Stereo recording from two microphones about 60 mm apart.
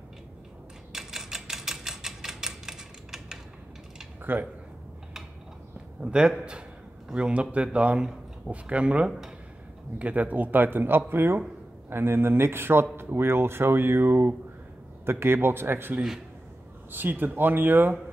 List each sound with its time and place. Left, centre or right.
0.9 s typewriter: centre
4.2 s speech: right
5.9 s a man's voice: centre
9.9 s speech: right